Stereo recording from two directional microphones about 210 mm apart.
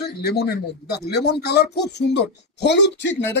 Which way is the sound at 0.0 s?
50° left (ahead or behind).